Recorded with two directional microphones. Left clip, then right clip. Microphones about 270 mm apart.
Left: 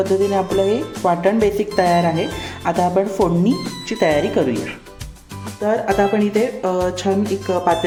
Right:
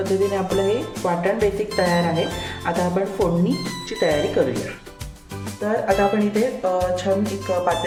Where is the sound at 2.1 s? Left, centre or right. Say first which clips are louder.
Left 1 dB; centre.